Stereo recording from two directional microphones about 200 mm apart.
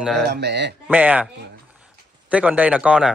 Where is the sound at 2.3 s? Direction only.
5° right (ahead or behind).